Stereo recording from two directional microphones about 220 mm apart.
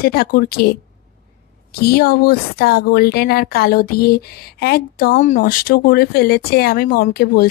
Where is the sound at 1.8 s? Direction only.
45° left (ahead or behind).